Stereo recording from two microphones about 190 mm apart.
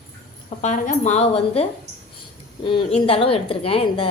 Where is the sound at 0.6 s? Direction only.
40° left (ahead or behind).